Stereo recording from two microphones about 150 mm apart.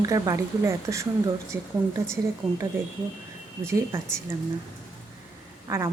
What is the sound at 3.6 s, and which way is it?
Speech, 15° right (ahead or behind).